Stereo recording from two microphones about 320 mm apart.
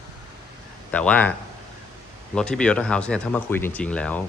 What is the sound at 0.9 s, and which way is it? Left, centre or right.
Speech, centre.